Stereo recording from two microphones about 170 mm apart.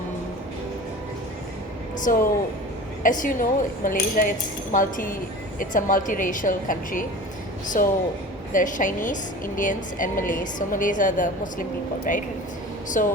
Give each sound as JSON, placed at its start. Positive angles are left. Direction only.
{"t": 2.0, "sound": "a woman's voice", "side_deg": 50}